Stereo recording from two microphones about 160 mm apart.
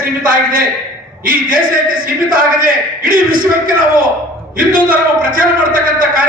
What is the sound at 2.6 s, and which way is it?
Speech, 60° right (ahead or behind).